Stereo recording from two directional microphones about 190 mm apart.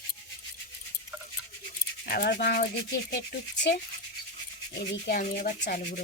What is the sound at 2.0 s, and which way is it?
Speech, 55° left (ahead or behind).